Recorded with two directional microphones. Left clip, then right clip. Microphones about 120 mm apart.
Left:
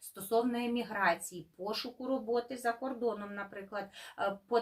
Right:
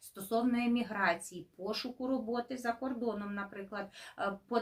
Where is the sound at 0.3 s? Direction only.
25° right (ahead or behind).